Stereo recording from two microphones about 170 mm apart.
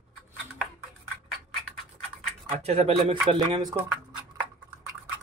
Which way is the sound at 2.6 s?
35° right (ahead or behind).